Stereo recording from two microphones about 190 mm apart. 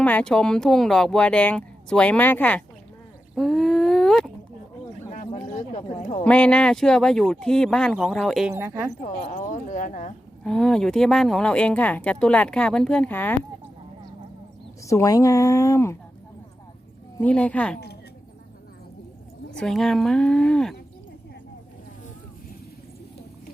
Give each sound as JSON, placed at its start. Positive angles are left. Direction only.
{"t": 0.0, "sound": "speech", "side_deg": 5}
{"t": 3.3, "sound": "a sound", "side_deg": 0}
{"t": 5.3, "sound": "a sound", "side_deg": 35}
{"t": 6.2, "sound": "speech", "side_deg": 5}
{"t": 9.0, "sound": "speech", "side_deg": 40}
{"t": 10.4, "sound": "speech", "side_deg": 5}
{"t": 14.8, "sound": "a woman's voice", "side_deg": 15}
{"t": 17.2, "sound": "a woman's voice", "side_deg": 5}
{"t": 19.5, "sound": "speech", "side_deg": 0}